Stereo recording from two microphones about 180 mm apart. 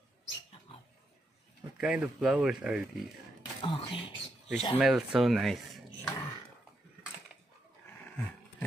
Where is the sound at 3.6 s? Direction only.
30° left (ahead or behind).